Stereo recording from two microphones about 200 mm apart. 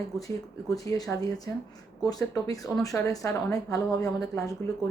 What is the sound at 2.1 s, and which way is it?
A woman's voice, 20° left (ahead or behind).